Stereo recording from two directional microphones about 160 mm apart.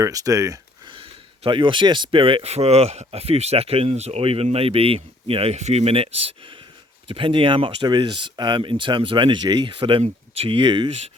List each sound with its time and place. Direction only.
0.0 s speech: 20° right (ahead or behind)
1.5 s speech: 30° right (ahead or behind)